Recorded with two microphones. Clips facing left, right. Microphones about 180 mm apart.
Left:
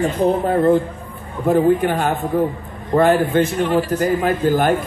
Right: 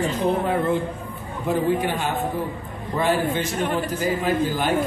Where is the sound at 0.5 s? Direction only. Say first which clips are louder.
Left 7 dB; 40° left (ahead or behind).